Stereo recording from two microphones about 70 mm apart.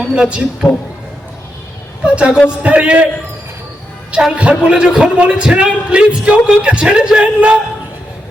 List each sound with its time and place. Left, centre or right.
0.0 s a man's voice: centre
2.0 s a man's voice: centre
4.1 s a man's voice: centre